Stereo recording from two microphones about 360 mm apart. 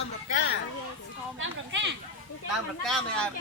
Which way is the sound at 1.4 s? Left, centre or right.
Right.